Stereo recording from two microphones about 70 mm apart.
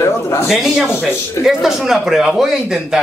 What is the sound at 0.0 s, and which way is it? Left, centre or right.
Speech, left.